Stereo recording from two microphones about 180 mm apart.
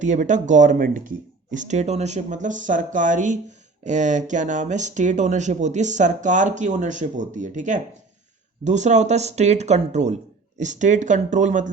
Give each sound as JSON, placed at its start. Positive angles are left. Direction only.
{"t": 0.0, "sound": "speech", "side_deg": -40}